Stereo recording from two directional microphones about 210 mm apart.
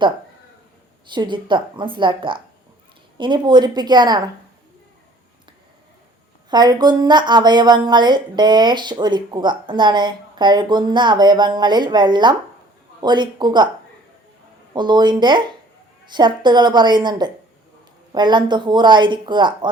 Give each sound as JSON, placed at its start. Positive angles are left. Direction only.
{"t": 1.0, "sound": "a woman's voice", "side_deg": -20}
{"t": 6.5, "sound": "a woman's voice", "side_deg": -20}
{"t": 14.7, "sound": "a woman's voice", "side_deg": -20}